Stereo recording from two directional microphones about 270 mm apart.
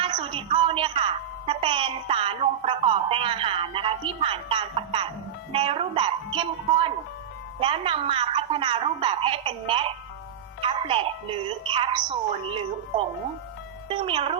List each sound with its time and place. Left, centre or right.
0.0 s a woman's voice: centre